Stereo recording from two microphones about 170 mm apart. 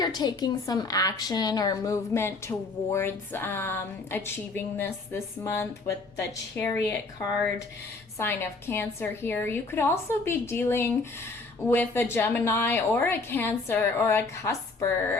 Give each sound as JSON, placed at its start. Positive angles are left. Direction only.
{"t": 0.0, "sound": "a woman's voice", "side_deg": 25}